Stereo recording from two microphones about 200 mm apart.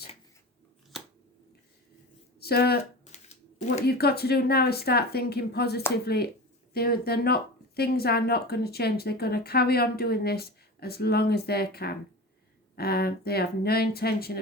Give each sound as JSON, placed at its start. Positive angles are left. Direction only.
{"t": 0.9, "sound": "scissors", "side_deg": 0}
{"t": 2.4, "sound": "speech", "side_deg": 50}
{"t": 3.8, "sound": "speech", "side_deg": 50}